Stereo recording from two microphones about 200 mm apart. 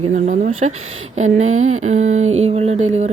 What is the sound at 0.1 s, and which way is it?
A woman's voice, 35° right (ahead or behind).